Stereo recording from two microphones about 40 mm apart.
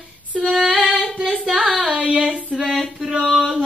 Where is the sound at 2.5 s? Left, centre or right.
Centre.